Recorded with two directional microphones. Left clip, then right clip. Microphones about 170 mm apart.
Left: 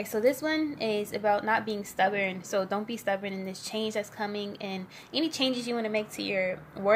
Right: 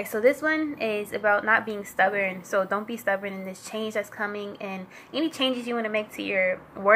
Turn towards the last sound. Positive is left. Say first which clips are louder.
# right 5 dB
turn(degrees=5)  # may be behind; listen again after turning